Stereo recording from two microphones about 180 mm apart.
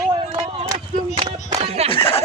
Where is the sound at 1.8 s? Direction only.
30° left (ahead or behind).